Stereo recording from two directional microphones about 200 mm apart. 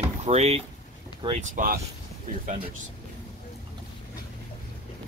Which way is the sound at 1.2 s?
35° right (ahead or behind).